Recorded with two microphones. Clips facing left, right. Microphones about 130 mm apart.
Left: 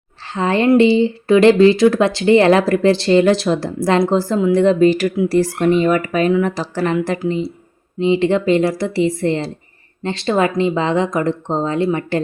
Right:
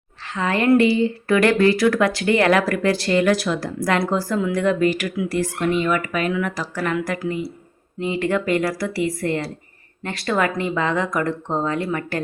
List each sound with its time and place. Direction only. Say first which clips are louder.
0.3 s speech: left 4 dB; 30° left (ahead or behind)